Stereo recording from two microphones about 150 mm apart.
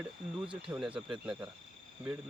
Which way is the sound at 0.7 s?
10° right (ahead or behind).